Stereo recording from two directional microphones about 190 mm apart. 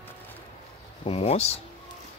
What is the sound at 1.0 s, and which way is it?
Speech, 30° left (ahead or behind).